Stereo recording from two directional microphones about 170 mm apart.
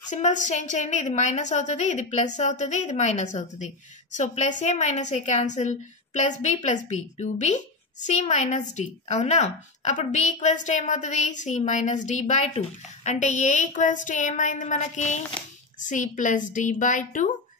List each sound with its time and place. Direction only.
0.1 s a woman's voice: 45° left (ahead or behind)